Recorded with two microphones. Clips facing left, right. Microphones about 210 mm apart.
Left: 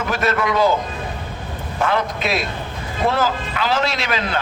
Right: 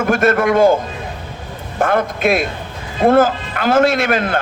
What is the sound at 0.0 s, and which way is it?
Speech, 50° right (ahead or behind).